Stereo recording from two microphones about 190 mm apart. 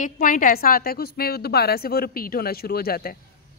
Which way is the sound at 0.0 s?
45° left (ahead or behind).